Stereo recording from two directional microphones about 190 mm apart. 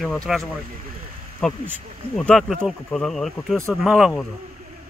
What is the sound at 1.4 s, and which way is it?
Speech, centre (ahead or behind).